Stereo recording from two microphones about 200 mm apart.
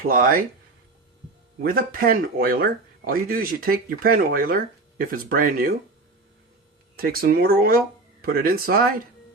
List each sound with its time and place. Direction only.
0.1 s speech: 45° right (ahead or behind)
1.6 s speech: 45° right (ahead or behind)
6.9 s speech: 50° right (ahead or behind)